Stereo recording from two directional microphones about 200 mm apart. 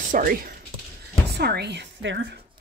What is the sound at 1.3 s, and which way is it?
A woman's voice, 55° right (ahead or behind).